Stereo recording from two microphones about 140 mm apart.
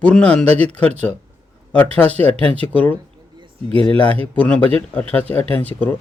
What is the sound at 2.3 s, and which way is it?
Speech, 45° right (ahead or behind).